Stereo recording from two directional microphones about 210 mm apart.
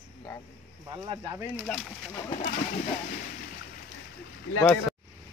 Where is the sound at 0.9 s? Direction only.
20° right (ahead or behind).